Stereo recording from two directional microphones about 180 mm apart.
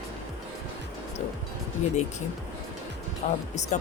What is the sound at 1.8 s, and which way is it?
Speech, 40° left (ahead or behind).